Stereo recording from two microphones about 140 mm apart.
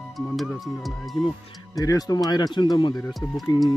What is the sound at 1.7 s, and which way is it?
Speech, 25° left (ahead or behind).